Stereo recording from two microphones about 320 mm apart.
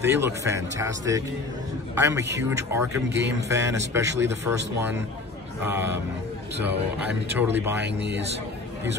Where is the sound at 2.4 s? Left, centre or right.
Centre.